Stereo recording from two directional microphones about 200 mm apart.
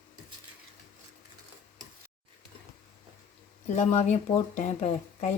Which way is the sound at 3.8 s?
35° left (ahead or behind).